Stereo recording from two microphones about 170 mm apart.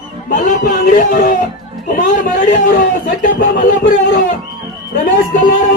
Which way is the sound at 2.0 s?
50° left (ahead or behind).